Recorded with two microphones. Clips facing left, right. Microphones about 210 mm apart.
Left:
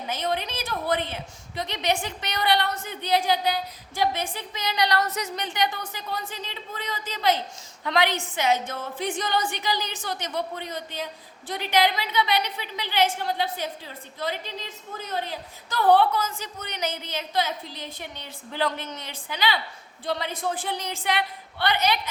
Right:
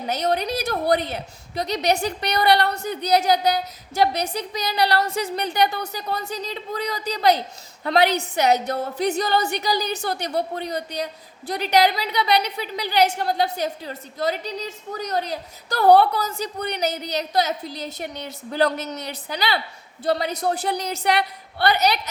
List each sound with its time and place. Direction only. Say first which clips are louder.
0.1 s a woman's voice: right 6 dB; 40° right (ahead or behind)